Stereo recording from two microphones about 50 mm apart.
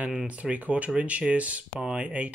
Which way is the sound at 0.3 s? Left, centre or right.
Right.